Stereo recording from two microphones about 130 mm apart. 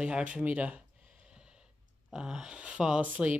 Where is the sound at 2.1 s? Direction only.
5° right (ahead or behind).